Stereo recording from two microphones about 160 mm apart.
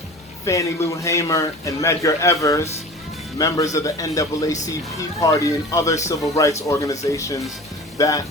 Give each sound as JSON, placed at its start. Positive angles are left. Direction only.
{"t": 0.4, "sound": "a man's voice", "side_deg": 20}